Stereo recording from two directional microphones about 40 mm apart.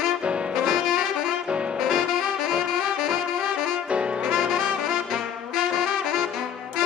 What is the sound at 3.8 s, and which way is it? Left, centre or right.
Saxophone, right.